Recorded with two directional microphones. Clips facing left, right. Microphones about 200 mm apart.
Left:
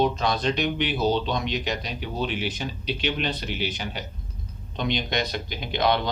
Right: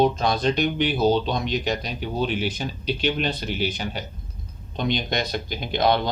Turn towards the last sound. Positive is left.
turn(degrees=-40)  # may be behind; listen again after turning